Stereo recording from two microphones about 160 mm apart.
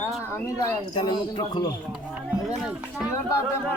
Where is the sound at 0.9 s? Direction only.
30° left (ahead or behind).